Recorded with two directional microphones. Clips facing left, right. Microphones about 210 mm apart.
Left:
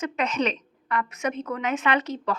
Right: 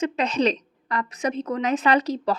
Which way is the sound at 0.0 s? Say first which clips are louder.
Right 4 dB; 35° right (ahead or behind).